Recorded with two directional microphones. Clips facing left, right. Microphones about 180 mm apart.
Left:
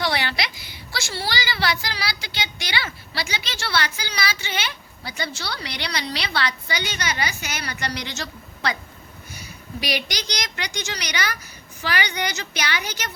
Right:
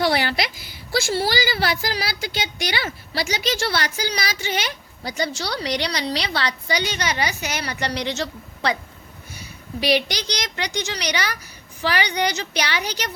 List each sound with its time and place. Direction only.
0.0 s a woman's voice: 40° right (ahead or behind)
9.8 s a woman's voice: 30° right (ahead or behind)